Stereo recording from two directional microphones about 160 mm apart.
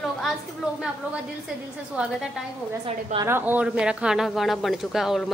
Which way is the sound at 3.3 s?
10° right (ahead or behind).